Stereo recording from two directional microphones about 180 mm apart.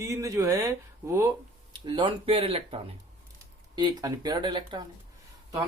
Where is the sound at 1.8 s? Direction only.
25° right (ahead or behind).